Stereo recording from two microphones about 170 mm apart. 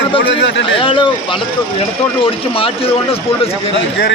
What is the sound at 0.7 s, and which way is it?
Speech, 30° left (ahead or behind).